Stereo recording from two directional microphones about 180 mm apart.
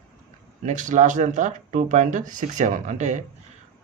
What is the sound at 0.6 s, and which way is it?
A man's voice, 45° right (ahead or behind).